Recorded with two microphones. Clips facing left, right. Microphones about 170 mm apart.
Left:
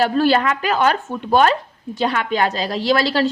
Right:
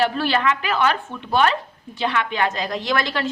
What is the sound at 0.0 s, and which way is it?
A woman's voice, 40° left (ahead or behind).